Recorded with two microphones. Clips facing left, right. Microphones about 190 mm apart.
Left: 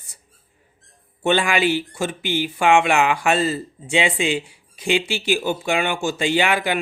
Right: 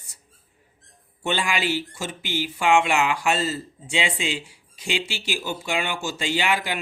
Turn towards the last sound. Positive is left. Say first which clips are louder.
# left 5 dB
turn(degrees=55)  # may be behind; listen again after turning